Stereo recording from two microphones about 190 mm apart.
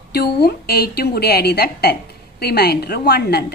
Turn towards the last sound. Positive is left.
turn(degrees=55)  # may be behind; listen again after turning